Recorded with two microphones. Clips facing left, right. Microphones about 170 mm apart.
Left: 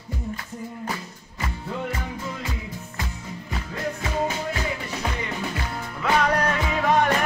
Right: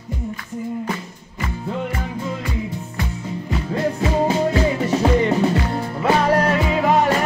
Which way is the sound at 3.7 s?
30° right (ahead or behind).